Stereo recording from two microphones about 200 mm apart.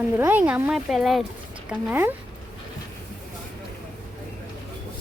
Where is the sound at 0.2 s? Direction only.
10° right (ahead or behind).